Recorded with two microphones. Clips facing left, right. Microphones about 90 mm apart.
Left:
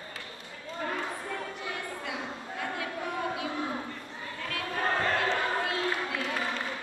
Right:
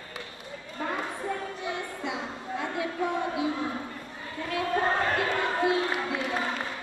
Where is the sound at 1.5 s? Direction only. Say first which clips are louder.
Right 3 dB; 20° right (ahead or behind).